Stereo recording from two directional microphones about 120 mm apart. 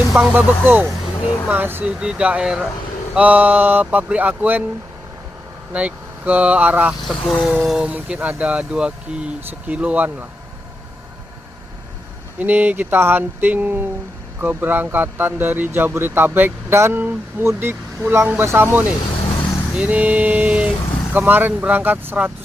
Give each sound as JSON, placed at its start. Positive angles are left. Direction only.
{"t": 0.2, "sound": "speech", "side_deg": -15}
{"t": 5.7, "sound": "speech", "side_deg": -10}
{"t": 7.0, "sound": "speech", "side_deg": 0}
{"t": 12.4, "sound": "speech", "side_deg": -15}